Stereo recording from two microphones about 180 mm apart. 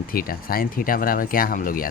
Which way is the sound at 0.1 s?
55° left (ahead or behind).